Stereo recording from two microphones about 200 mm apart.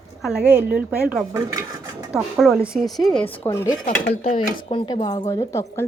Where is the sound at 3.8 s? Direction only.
45° left (ahead or behind).